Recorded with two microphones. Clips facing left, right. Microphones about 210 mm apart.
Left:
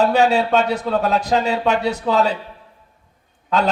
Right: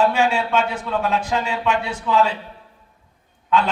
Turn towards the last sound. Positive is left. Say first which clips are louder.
# even
turn(degrees=40)  # may be behind; listen again after turning